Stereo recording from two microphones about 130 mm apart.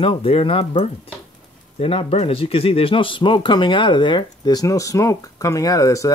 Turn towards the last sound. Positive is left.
turn(degrees=25)  # may be behind; listen again after turning